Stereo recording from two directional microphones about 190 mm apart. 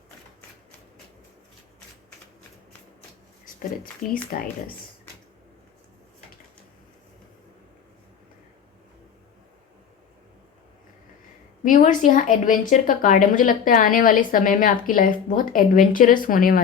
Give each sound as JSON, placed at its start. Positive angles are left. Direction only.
{"t": 4.1, "sound": "speech", "side_deg": 50}
{"t": 11.6, "sound": "speech", "side_deg": 45}